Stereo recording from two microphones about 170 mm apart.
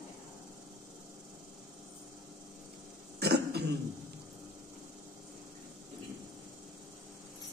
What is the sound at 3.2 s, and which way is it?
Cough, 75° right (ahead or behind).